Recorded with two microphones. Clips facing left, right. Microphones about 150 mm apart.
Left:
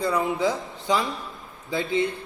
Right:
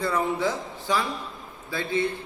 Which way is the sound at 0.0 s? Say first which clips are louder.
Left 2 dB; 15° left (ahead or behind).